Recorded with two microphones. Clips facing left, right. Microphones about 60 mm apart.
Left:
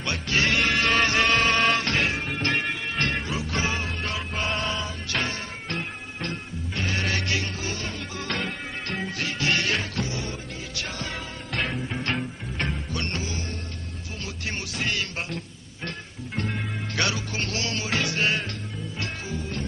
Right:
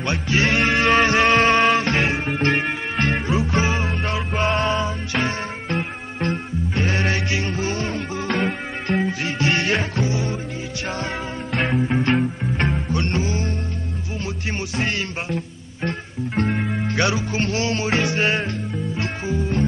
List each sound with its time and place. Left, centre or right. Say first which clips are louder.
0.0 s music: right 4 dB; right
8.9 s music: right 11 dB; centre
9.2 s music: right 4 dB; right
11.7 s music: right 9 dB; right
14.8 s music: right 3 dB; right
16.3 s music: right 8 dB; right
16.8 s music: right 5 dB; right